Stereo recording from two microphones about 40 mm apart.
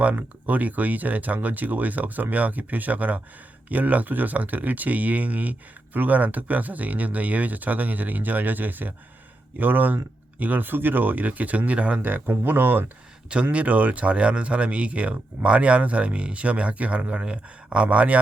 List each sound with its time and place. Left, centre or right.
0.0 s speech: right
11.9 s speech: right
13.3 s speech: right